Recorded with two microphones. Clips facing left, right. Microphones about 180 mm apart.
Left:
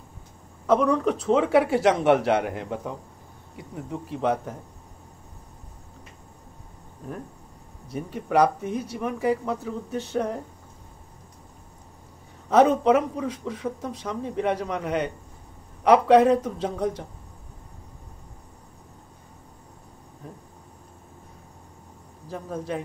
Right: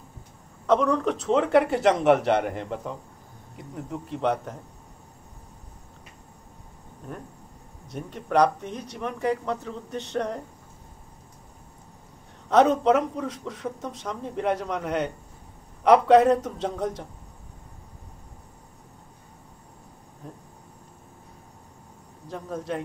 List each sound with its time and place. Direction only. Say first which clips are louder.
0.7 s speech: left 1 dB; centre (ahead or behind)
7.9 s speech: left 1 dB; 5° left (ahead or behind)
12.4 s speech: left 1 dB; centre (ahead or behind)
20.2 s a sound: even; 5° left (ahead or behind)
22.3 s speech: even; centre (ahead or behind)